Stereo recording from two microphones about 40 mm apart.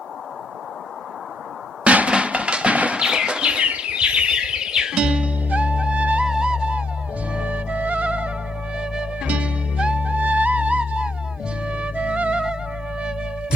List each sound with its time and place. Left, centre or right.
1.8 s music: right
3.0 s bird flight: right
3.7 s music: right
5.5 s music: right
6.2 s music: right
8.7 s music: right